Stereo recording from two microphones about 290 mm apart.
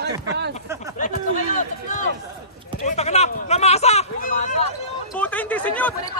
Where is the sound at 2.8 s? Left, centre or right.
Left.